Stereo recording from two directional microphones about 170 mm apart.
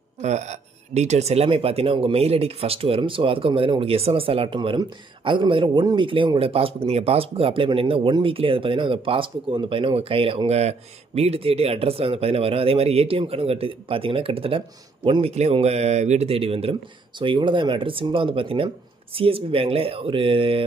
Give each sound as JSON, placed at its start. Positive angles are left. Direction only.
{"t": 0.2, "sound": "speech", "side_deg": -40}